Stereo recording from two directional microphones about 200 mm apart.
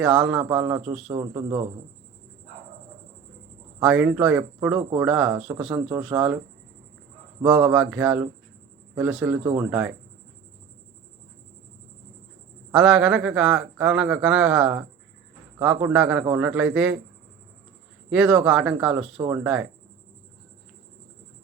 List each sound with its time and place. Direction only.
0.0 s a man's voice: 5° right (ahead or behind)
1.0 s a man's voice: 20° right (ahead or behind)
3.8 s a man's voice: 5° right (ahead or behind)
7.4 s a man's voice: 5° right (ahead or behind)
12.7 s a man's voice: 5° right (ahead or behind)
18.1 s a man's voice: 5° right (ahead or behind)